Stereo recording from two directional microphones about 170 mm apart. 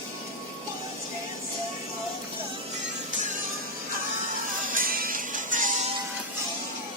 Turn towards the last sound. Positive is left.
turn(degrees=-50)  # may be behind; listen again after turning